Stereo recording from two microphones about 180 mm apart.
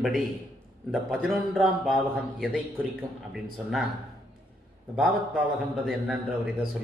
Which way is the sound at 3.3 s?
Centre (ahead or behind).